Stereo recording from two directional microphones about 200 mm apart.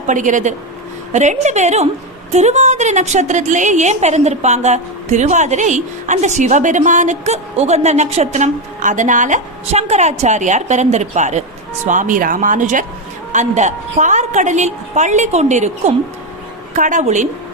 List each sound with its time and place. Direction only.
0.1 s a woman's voice: 40° right (ahead or behind)